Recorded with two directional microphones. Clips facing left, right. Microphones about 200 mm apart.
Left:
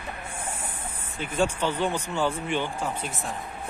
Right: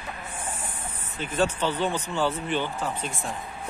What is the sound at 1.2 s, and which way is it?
Speech, 10° left (ahead or behind).